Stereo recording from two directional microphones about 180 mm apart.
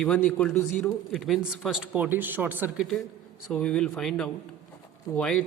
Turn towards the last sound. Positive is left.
turn(degrees=5)  # may be behind; listen again after turning